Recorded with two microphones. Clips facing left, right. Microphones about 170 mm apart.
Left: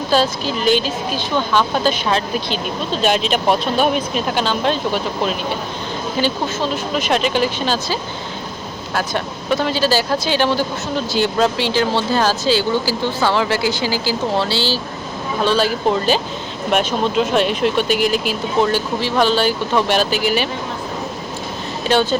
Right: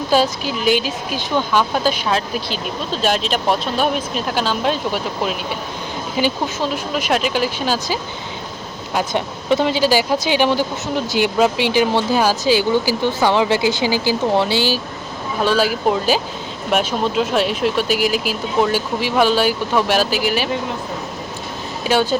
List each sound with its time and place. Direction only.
0.1 s speech: 10° right (ahead or behind)
9.0 s speech: 20° right (ahead or behind); by 20.5 s centre (ahead or behind)
21.8 s speech: 5° right (ahead or behind)